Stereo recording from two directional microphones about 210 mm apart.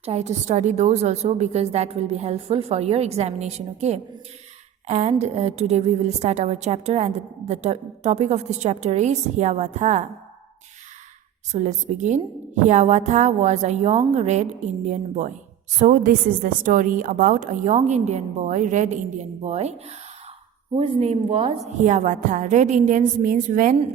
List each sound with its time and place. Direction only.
0.0 s a woman's voice: 30° right (ahead or behind)
11.5 s a woman's voice: 35° right (ahead or behind)
20.7 s a woman's voice: 25° right (ahead or behind)